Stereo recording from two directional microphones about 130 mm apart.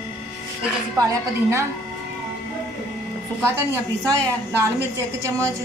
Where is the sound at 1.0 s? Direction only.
25° right (ahead or behind).